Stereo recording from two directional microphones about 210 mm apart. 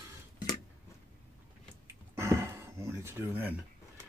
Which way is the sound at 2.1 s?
10° right (ahead or behind).